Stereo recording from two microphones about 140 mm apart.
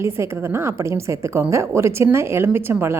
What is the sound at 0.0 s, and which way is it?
A woman's voice, 20° right (ahead or behind).